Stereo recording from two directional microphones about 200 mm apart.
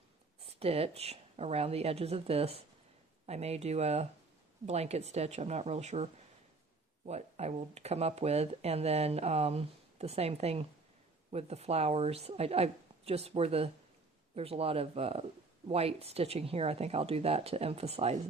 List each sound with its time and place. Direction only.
0.4 s speech: 30° right (ahead or behind)